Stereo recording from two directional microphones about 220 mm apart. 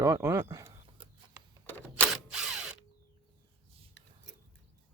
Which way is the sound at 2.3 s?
5° right (ahead or behind).